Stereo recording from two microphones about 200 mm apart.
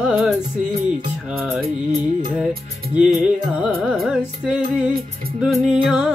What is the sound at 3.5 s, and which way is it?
Music, 5° right (ahead or behind).